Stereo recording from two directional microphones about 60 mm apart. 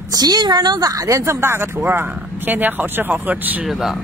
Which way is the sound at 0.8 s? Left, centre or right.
Right.